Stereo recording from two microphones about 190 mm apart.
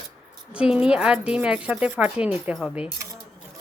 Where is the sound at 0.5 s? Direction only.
5° right (ahead or behind).